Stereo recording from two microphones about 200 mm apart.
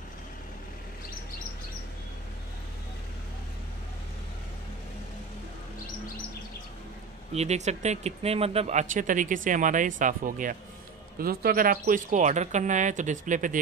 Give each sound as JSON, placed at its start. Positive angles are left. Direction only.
{"t": 7.3, "sound": "speech", "side_deg": -35}